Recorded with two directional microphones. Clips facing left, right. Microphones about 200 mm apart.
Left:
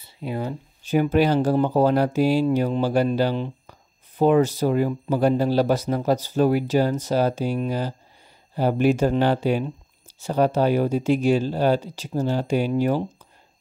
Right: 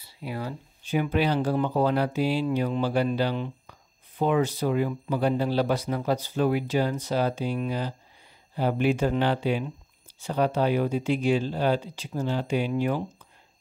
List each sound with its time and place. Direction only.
0.0 s speech: 25° left (ahead or behind)
0.8 s speech: 40° left (ahead or behind)